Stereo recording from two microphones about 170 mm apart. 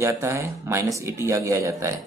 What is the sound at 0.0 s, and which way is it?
Speech, 15° right (ahead or behind).